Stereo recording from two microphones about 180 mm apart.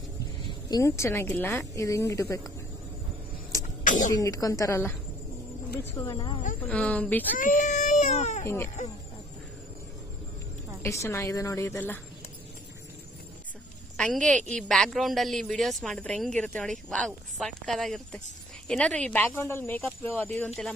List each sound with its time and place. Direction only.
0.7 s speech: 20° left (ahead or behind)
3.8 s speech: 45° left (ahead or behind)
4.1 s speech: 20° left (ahead or behind)
6.0 s speech: 25° left (ahead or behind)
6.7 s speech: 5° left (ahead or behind)
7.3 s baby cry: 45° left (ahead or behind)
10.8 s speech: 15° left (ahead or behind)
13.9 s a woman's voice: 5° left (ahead or behind)